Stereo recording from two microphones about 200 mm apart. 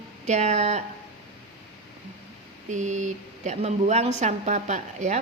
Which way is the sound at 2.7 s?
40° right (ahead or behind).